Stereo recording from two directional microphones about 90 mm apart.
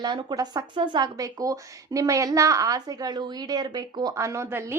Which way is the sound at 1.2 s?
40° right (ahead or behind).